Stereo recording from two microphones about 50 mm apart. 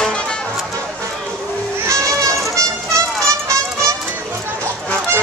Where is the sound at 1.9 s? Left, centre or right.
Right.